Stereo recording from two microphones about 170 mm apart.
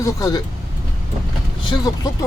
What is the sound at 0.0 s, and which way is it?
Speech, 20° left (ahead or behind).